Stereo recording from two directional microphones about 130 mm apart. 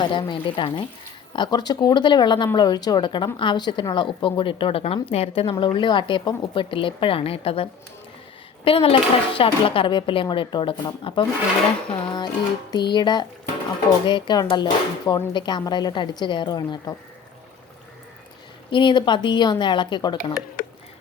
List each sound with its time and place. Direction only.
0.0 s a woman's voice: 40° left (ahead or behind)
18.7 s a woman's voice: 35° left (ahead or behind)
20.6 s a sound: 90° left